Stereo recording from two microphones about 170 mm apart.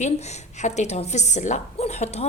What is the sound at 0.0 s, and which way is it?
A woman's voice, 40° left (ahead or behind).